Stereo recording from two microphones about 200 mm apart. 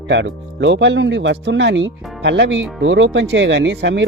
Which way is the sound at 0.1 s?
65° right (ahead or behind).